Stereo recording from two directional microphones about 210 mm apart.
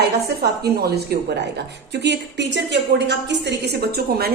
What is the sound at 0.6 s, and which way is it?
A woman's voice, 50° right (ahead or behind).